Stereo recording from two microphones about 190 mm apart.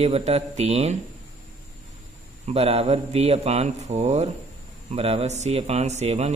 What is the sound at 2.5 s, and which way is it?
Speech, 35° right (ahead or behind).